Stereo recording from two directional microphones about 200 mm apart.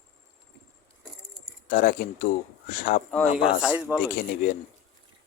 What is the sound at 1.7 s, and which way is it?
Speech, 45° left (ahead or behind).